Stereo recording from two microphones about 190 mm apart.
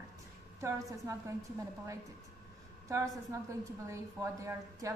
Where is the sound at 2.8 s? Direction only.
15° right (ahead or behind).